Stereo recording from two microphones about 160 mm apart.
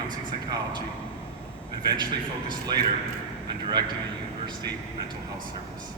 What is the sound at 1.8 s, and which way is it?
A man's voice, 25° right (ahead or behind).